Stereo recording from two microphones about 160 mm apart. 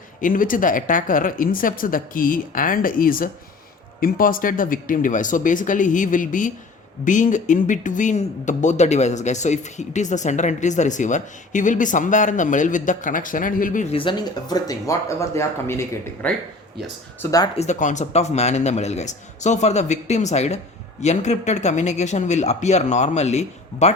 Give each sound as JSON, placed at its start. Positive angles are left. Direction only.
{"t": 0.2, "sound": "a woman's voice", "side_deg": 55}
{"t": 13.9, "sound": "speech", "side_deg": 30}
{"t": 17.6, "sound": "speech", "side_deg": 50}